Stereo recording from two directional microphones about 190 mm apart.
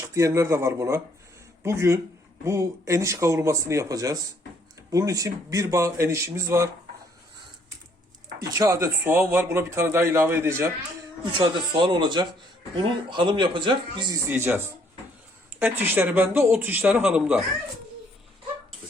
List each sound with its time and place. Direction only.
0.0 s speech: 15° right (ahead or behind)
8.4 s speech: 15° right (ahead or behind)
11.3 s speech: 25° right (ahead or behind)
14.3 s speech: 10° right (ahead or behind)